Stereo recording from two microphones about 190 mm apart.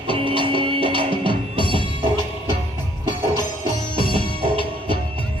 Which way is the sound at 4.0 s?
25° left (ahead or behind).